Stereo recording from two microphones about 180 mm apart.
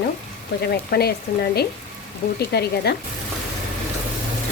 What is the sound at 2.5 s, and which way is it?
Speech, 60° left (ahead or behind).